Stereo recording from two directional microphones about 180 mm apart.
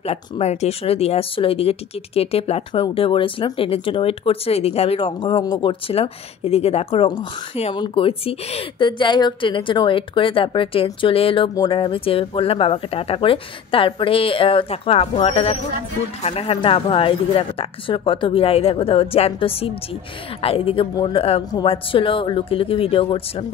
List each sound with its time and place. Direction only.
0.0 s speech: 35° left (ahead or behind)